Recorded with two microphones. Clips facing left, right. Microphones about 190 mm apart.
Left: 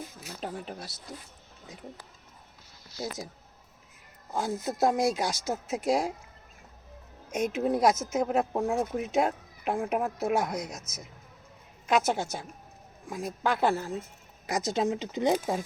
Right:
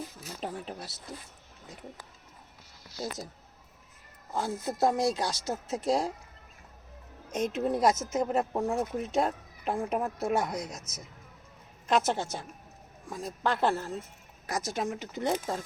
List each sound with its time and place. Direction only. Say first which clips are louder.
0.3 s speech: left 1 dB; 5° left (ahead or behind)
4.3 s speech: left 1 dB; 15° left (ahead or behind)
7.3 s speech: left 2 dB; 5° left (ahead or behind)